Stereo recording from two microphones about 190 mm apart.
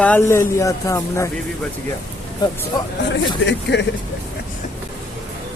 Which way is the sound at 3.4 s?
65° left (ahead or behind).